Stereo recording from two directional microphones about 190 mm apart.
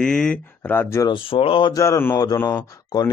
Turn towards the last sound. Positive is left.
turn(degrees=20)  # may be behind; listen again after turning